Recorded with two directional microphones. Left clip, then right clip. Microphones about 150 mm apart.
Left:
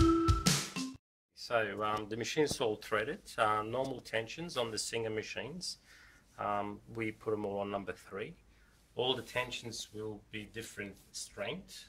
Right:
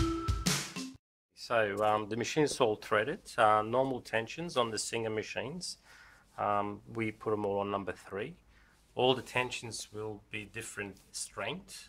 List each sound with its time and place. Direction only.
0.2 s music: centre (ahead or behind)
1.4 s speech: 55° right (ahead or behind)